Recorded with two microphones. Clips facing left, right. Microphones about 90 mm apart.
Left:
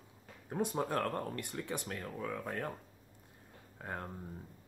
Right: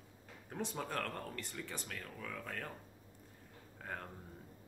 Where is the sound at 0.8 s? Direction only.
25° left (ahead or behind).